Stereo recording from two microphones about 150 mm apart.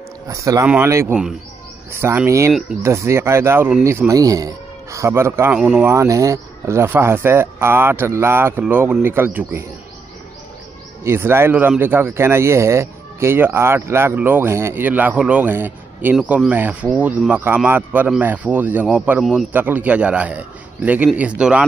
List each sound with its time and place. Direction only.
0.3 s a man's voice: 20° right (ahead or behind); by 5.9 s 5° right (ahead or behind)
5.9 s speech: 20° right (ahead or behind)
11.1 s a man's voice: 15° right (ahead or behind)